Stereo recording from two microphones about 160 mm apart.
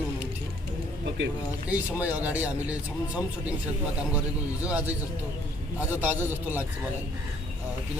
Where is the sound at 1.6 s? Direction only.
10° right (ahead or behind).